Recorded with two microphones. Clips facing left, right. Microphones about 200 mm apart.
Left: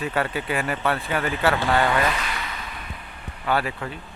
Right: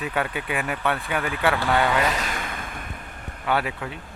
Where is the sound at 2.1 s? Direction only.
45° right (ahead or behind).